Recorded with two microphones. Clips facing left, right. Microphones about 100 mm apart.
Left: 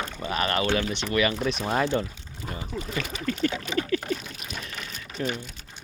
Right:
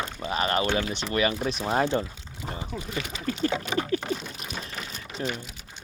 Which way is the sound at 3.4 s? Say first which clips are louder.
Right 1 dB; 30° right (ahead or behind).